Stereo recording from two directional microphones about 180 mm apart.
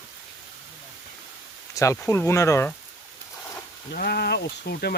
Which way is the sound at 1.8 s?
15° left (ahead or behind).